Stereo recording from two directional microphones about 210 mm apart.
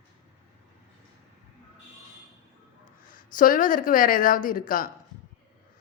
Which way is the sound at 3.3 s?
40° left (ahead or behind).